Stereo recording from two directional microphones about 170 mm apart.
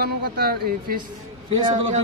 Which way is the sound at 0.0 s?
65° right (ahead or behind).